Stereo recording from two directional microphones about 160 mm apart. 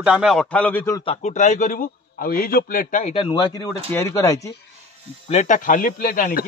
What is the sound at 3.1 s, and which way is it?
Speech, 30° left (ahead or behind).